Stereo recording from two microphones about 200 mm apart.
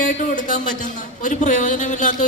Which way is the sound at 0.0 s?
40° left (ahead or behind).